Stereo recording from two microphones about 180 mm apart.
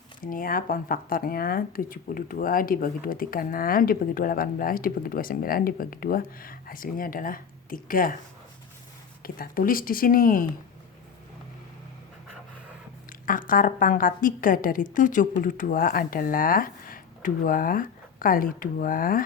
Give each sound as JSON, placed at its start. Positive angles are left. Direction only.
{"t": 0.2, "sound": "speech", "side_deg": 50}
{"t": 9.2, "sound": "speech", "side_deg": 55}
{"t": 13.1, "sound": "speech", "side_deg": 50}